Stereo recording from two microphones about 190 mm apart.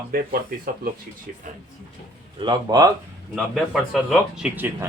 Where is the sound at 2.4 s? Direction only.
20° right (ahead or behind).